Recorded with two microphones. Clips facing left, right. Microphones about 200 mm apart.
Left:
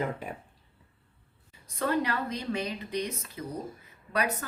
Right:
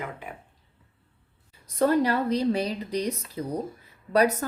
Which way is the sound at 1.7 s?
35° right (ahead or behind).